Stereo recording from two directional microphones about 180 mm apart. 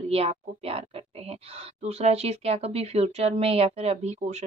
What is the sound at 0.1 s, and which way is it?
Speech, 35° right (ahead or behind).